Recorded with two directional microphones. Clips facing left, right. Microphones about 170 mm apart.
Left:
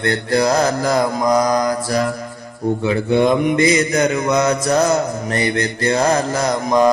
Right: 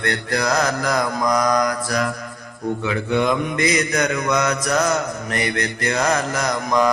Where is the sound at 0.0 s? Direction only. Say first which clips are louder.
Left 6 dB; 30° left (ahead or behind).